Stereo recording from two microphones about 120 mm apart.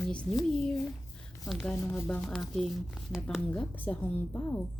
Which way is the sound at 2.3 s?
Centre (ahead or behind).